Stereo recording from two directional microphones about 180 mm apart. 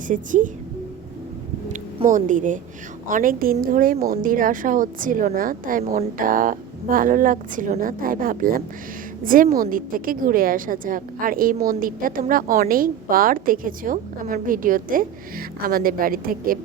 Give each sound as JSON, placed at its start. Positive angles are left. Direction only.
{"t": 0.1, "sound": "a woman's voice", "side_deg": -45}
{"t": 1.7, "sound": "a woman's voice", "side_deg": -45}